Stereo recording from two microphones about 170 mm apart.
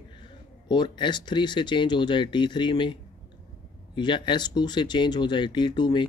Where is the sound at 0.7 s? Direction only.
25° left (ahead or behind).